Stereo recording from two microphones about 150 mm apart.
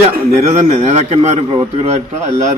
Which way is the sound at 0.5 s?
50° right (ahead or behind).